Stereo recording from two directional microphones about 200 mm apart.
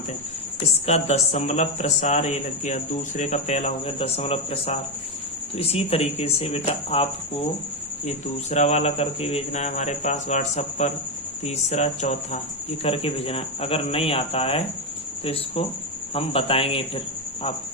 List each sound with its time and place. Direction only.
0.9 s speech: 35° left (ahead or behind)